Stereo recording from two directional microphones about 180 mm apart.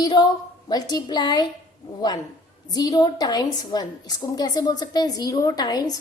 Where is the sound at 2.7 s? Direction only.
20° left (ahead or behind).